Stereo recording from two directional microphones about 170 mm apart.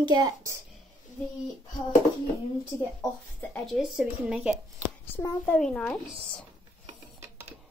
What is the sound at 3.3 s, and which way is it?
Speech, centre (ahead or behind).